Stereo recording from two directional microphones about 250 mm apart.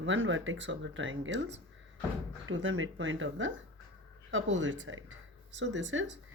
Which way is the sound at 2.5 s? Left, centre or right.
Right.